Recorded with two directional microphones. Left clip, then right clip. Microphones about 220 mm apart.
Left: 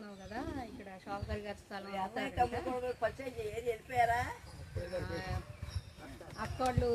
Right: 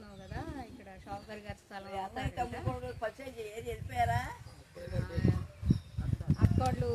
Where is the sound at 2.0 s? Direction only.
45° right (ahead or behind).